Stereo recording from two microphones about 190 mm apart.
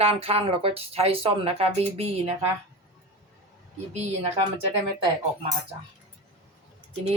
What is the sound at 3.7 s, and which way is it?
Speech, 35° right (ahead or behind).